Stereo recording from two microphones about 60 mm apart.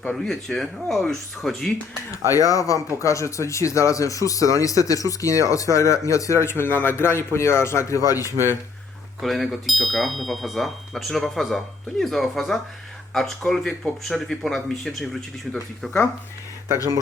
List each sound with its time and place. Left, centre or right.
0.0 s speech: centre
2.3 s speech: left
9.2 s speech: centre